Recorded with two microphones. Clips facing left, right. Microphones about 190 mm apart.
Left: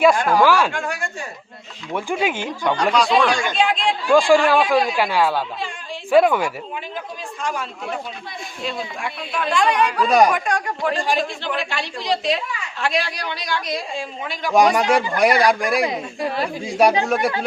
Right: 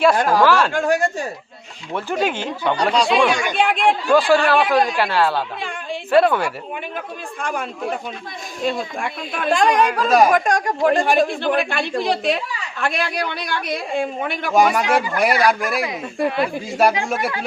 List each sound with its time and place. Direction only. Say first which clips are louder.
0.3 s speech: even; 10° left (ahead or behind)
0.7 s speech: right 8 dB; 40° right (ahead or behind)
1.9 s speech: right 1 dB; 10° left (ahead or behind)
2.7 s speech: even; 30° right (ahead or behind)
3.2 s speech: right 1 dB; 20° right (ahead or behind)
3.5 s a man's voice: right 2 dB; 60° right (ahead or behind)
4.1 s speech: left 2 dB; 10° left (ahead or behind)
7.4 s a man's voice: right 2 dB; 55° right (ahead or behind)
10.1 s speech: even; centre (ahead or behind)
10.3 s a man's voice: right 5 dB; 45° right (ahead or behind)
14.5 s speech: left 1 dB; centre (ahead or behind)